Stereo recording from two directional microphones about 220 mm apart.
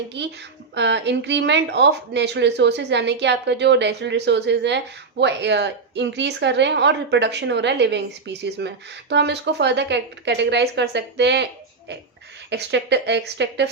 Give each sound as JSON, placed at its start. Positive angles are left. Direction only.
{"t": 0.2, "sound": "speech", "side_deg": -50}
{"t": 12.5, "sound": "speech", "side_deg": -50}